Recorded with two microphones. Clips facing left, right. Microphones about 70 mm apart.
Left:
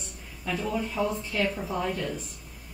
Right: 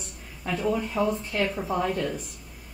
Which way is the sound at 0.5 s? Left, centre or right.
Right.